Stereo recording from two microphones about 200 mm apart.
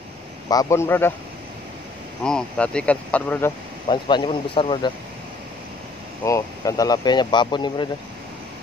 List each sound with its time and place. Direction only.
0.5 s speech: 15° left (ahead or behind)
2.2 s speech: 5° left (ahead or behind)
3.8 s speech: 25° left (ahead or behind)
6.2 s speech: 15° left (ahead or behind)